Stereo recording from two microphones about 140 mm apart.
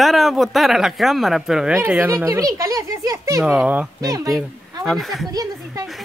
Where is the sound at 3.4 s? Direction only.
5° right (ahead or behind).